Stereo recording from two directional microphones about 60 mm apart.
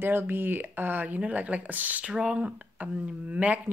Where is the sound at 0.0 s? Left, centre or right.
Right.